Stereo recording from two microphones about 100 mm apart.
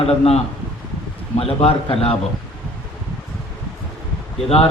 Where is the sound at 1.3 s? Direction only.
80° left.